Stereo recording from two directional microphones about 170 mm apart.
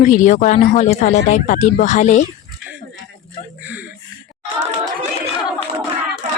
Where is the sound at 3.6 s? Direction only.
10° right (ahead or behind).